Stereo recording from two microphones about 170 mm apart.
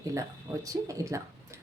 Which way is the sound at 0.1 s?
20° right (ahead or behind).